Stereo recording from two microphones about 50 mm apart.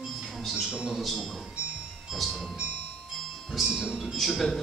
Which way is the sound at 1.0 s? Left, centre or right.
Centre.